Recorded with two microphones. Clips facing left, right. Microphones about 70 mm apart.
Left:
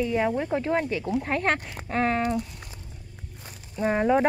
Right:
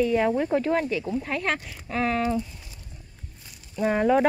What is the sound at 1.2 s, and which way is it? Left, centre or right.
Speech, left.